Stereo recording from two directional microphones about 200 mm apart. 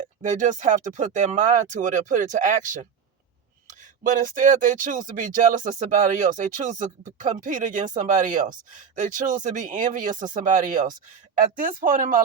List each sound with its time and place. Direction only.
0.2 s speech: 40° right (ahead or behind)